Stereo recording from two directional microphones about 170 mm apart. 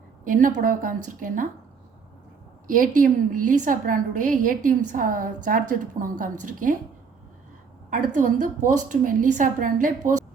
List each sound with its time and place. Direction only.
0.3 s a woman's voice: 50° right (ahead or behind)
2.6 s a woman's voice: 55° right (ahead or behind)
7.9 s a woman's voice: 50° right (ahead or behind)